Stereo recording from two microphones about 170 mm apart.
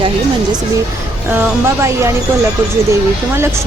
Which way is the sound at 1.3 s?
15° right (ahead or behind).